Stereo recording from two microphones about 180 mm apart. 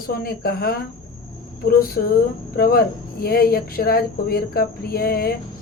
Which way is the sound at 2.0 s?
55° left (ahead or behind).